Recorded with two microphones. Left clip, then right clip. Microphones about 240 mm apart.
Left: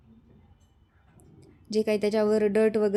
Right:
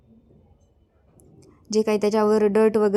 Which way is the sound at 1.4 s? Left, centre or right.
Centre.